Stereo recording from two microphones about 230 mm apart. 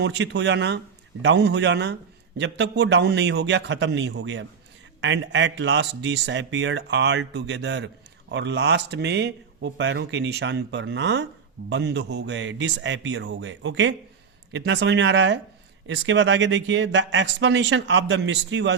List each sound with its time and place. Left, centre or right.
0.0 s speech: right